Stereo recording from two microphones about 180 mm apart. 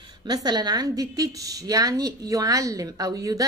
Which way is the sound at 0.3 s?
25° right (ahead or behind).